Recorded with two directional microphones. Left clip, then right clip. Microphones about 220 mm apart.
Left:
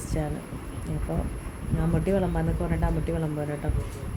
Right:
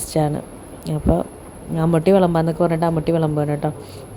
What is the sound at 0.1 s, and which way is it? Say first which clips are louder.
Speech: right 13 dB; 35° right (ahead or behind).